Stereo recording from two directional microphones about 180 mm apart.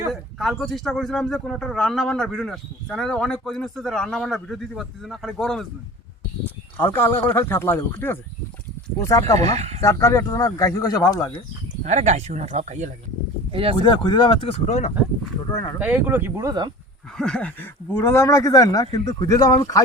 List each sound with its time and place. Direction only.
0.1 s speech: centre (ahead or behind)
6.7 s speech: 10° left (ahead or behind)
9.6 s speech: 35° right (ahead or behind)
9.8 s speech: 15° left (ahead or behind)
11.8 s speech: 40° right (ahead or behind)
13.8 s speech: 25° left (ahead or behind)
15.4 s speech: 20° left (ahead or behind)
15.8 s speech: 10° right (ahead or behind)
17.2 s speech: 5° left (ahead or behind)